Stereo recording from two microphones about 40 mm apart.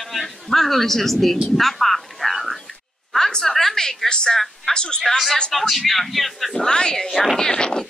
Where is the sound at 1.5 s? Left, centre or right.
Centre.